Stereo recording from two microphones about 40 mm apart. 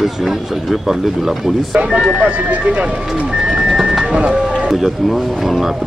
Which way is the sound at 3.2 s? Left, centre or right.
Right.